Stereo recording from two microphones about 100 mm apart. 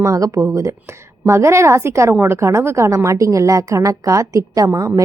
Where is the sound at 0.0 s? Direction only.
35° right (ahead or behind).